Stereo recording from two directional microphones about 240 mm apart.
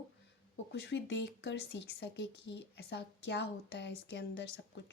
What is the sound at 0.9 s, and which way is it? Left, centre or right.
A woman's voice, left.